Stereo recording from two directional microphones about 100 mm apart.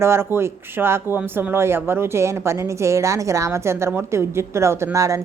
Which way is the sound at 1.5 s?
25° right (ahead or behind).